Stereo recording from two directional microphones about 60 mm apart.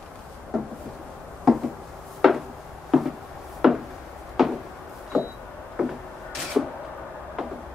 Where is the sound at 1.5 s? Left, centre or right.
Centre.